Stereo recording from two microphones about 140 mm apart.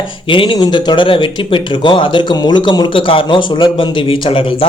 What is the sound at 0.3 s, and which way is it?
A man's voice, 35° left (ahead or behind).